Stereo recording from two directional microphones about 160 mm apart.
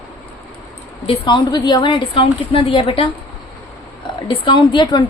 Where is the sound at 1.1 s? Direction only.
30° left (ahead or behind).